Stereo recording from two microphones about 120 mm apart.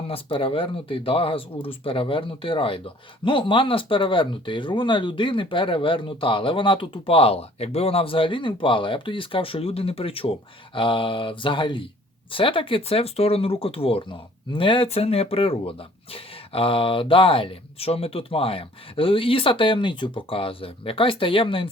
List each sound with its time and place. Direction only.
0.1 s speech: 45° left (ahead or behind)